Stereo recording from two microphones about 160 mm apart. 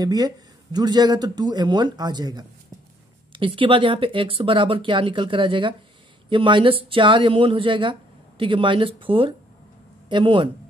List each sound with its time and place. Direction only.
0.0 s a man's voice: 25° right (ahead or behind)